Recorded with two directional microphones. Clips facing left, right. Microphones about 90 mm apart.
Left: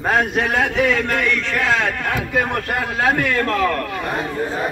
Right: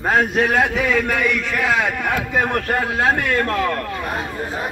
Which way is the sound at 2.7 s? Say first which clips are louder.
Even; 25° right (ahead or behind).